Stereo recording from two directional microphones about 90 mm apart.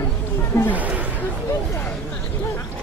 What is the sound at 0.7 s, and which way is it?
Speech, 15° right (ahead or behind).